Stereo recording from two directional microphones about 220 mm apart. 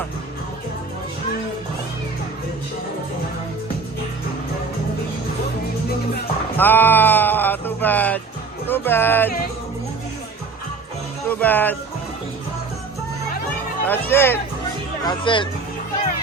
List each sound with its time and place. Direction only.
6.6 s speech: 10° left (ahead or behind)
11.3 s speech: 10° left (ahead or behind)
13.8 s speech: 10° left (ahead or behind)
15.0 s speech: 20° left (ahead or behind)